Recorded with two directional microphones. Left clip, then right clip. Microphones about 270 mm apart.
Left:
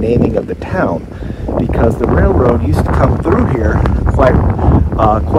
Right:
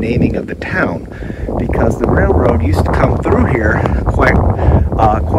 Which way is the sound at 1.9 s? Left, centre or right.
Centre.